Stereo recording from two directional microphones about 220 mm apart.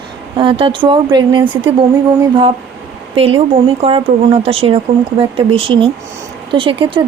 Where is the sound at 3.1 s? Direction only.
25° right (ahead or behind).